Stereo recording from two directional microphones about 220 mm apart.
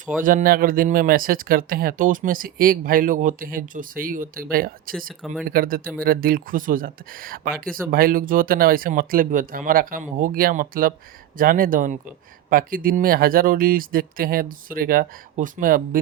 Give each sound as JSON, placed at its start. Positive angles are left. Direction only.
{"t": 0.2, "sound": "speech", "side_deg": -40}
{"t": 5.2, "sound": "speech", "side_deg": 0}
{"t": 5.5, "sound": "speech", "side_deg": -40}